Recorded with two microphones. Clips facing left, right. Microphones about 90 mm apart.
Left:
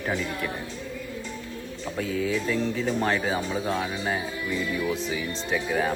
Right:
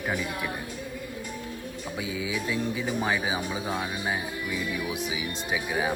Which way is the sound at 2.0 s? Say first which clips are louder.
Left 7 dB; 55° left (ahead or behind).